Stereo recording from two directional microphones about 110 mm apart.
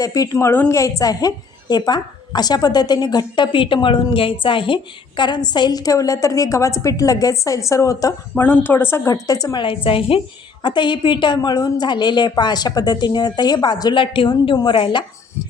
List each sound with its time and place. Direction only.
0.0 s a woman's voice: 30° left (ahead or behind)
8.4 s a woman's voice: 15° left (ahead or behind); by 10.2 s 55° left (ahead or behind)
10.6 s a woman's voice: 45° left (ahead or behind)